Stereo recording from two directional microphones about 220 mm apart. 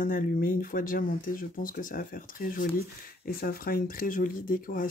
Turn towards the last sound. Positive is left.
turn(degrees=40)  # may be behind; listen again after turning